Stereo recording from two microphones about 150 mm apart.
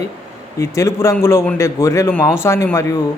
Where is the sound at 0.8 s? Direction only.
20° left (ahead or behind).